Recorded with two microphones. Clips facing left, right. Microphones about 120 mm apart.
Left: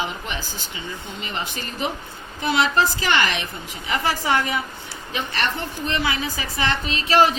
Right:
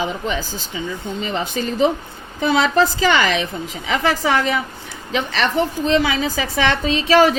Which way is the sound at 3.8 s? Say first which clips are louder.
Right 4 dB; 90° right.